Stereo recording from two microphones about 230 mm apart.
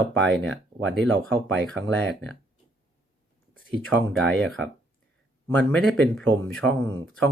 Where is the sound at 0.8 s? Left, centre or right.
Right.